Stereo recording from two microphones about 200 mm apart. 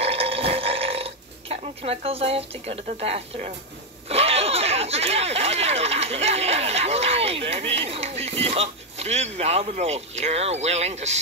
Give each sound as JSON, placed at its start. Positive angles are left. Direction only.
{"t": 0.0, "sound": "burping", "side_deg": -30}
{"t": 4.1, "sound": "speech", "side_deg": -30}